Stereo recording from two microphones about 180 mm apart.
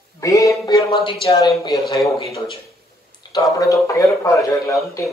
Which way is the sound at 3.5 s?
15° left (ahead or behind).